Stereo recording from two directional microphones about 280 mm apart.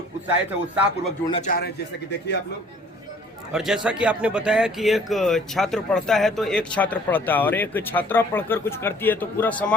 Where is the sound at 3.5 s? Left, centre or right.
Centre.